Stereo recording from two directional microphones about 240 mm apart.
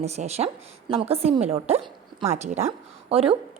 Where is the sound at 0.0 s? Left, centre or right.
Right.